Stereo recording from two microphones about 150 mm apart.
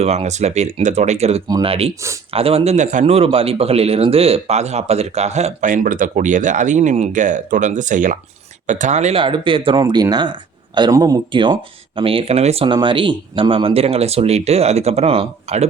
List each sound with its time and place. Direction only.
0.0 s speech: 45° right (ahead or behind)
9.2 s speech: 35° right (ahead or behind)